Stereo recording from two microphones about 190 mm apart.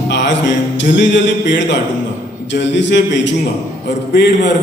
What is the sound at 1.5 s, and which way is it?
A man's voice, 70° left (ahead or behind).